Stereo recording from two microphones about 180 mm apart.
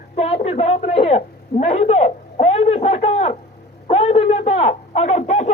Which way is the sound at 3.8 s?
35° left (ahead or behind).